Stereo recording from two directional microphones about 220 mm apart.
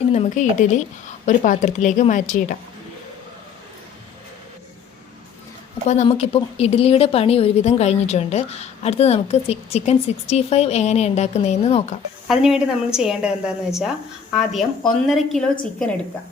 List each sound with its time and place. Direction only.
0.1 s a woman's voice: 30° left (ahead or behind)
5.9 s a woman's voice: 30° left (ahead or behind)
12.3 s a woman's voice: 5° right (ahead or behind)